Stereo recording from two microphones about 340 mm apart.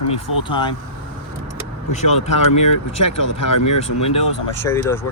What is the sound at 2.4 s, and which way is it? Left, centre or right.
Speech, left.